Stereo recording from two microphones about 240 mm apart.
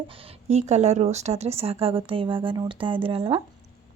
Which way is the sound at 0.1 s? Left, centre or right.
Right.